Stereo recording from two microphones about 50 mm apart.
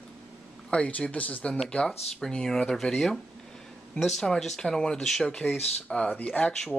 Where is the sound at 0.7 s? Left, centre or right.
Left.